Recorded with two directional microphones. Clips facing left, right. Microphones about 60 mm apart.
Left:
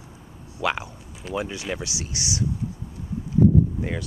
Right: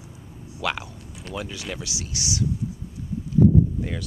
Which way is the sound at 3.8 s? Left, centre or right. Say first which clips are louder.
Left 1 dB; left.